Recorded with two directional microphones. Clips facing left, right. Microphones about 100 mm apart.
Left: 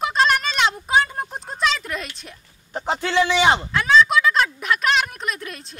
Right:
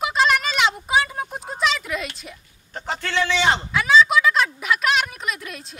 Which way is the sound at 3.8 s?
Centre (ahead or behind).